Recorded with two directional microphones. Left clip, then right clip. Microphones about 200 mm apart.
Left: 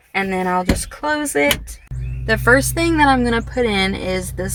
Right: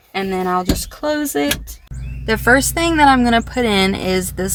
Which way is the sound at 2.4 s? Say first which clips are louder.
Right 1 dB; 45° right (ahead or behind).